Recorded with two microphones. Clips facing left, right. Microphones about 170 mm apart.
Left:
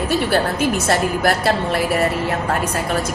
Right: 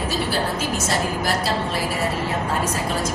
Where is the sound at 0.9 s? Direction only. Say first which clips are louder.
Left 4 dB; 60° left (ahead or behind).